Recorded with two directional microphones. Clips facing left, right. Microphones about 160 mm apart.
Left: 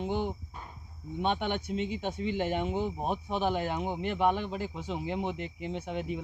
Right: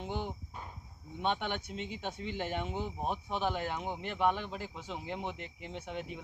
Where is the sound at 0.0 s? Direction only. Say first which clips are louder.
Left 6 dB; 15° left (ahead or behind).